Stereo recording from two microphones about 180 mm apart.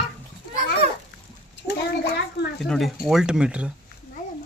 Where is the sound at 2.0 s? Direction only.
65° left (ahead or behind).